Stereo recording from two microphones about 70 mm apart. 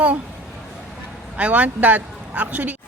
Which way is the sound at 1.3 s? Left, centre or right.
Right.